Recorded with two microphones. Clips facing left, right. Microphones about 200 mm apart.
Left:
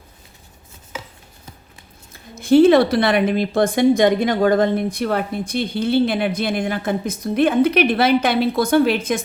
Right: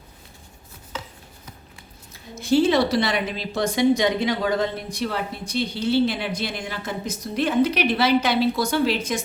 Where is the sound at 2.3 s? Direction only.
55° left (ahead or behind).